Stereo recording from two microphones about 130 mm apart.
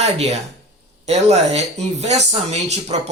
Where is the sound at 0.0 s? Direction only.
55° right (ahead or behind).